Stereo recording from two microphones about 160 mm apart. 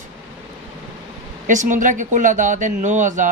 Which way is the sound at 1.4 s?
55° right (ahead or behind).